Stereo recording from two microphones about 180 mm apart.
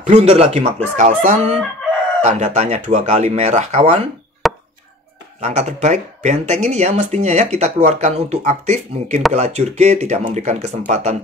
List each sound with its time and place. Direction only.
0.1 s speech: 35° right (ahead or behind)
4.4 s chop: centre (ahead or behind)
5.4 s speech: 35° right (ahead or behind)